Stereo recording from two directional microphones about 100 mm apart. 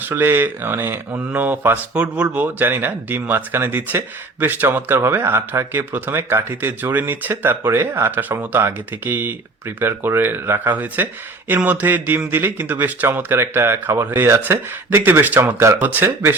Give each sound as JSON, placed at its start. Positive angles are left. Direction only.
{"t": 0.0, "sound": "speech", "side_deg": -20}